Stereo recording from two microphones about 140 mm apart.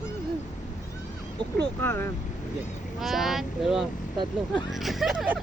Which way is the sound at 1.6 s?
15° left (ahead or behind).